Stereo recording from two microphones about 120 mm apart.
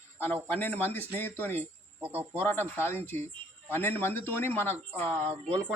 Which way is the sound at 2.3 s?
20° left (ahead or behind).